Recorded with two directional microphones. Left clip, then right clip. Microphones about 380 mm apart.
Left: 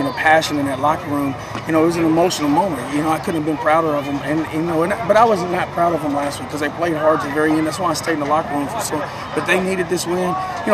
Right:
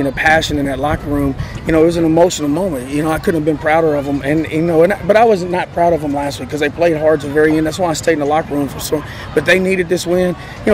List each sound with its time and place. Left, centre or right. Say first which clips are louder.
0.2 s speech: right 1 dB; right
9.5 s speech: right 5 dB; right